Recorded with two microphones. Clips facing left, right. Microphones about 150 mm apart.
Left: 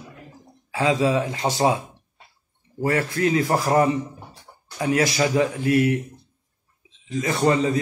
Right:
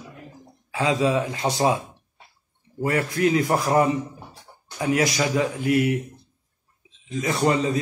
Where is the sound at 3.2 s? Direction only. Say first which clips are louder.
Right 1 dB; 30° left (ahead or behind).